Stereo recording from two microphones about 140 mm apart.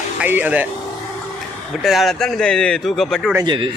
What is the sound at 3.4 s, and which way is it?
Speech, 35° right (ahead or behind).